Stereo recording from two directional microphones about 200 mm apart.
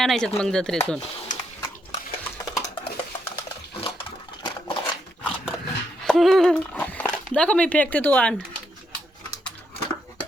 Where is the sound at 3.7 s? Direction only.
30° left (ahead or behind).